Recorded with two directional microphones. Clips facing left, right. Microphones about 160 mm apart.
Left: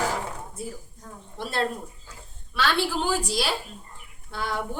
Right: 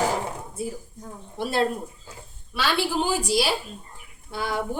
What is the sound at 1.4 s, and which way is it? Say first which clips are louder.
Speech: right 4 dB; 10° right (ahead or behind).